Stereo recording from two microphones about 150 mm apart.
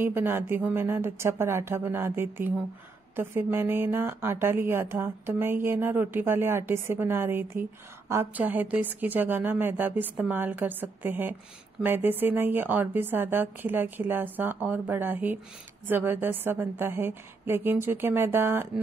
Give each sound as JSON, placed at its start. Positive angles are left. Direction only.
{"t": 0.0, "sound": "a woman's voice", "side_deg": -15}